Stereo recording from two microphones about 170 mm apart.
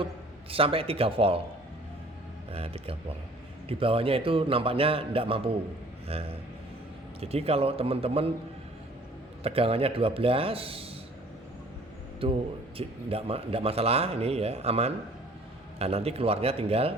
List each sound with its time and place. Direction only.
0.5 s speech: 35° right (ahead or behind)
2.5 s speech: 35° right (ahead or behind)
9.4 s speech: 35° right (ahead or behind)
12.2 s speech: 35° right (ahead or behind)